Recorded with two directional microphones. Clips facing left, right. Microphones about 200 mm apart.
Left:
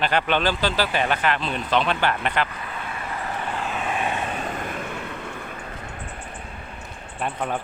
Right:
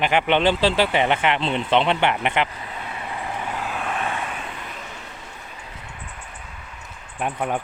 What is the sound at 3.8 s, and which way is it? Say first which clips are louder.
Vehicle: left 2 dB; 10° left (ahead or behind).